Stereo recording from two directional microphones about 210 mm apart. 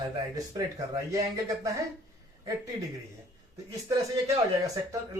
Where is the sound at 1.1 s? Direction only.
15° right (ahead or behind).